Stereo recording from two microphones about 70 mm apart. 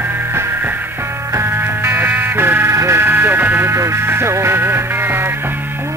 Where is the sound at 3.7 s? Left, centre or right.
Right.